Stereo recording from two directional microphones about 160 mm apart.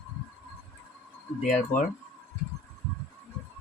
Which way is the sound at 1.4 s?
50° left (ahead or behind).